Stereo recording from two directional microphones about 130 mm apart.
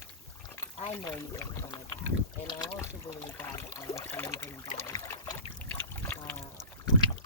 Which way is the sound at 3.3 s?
20° left (ahead or behind).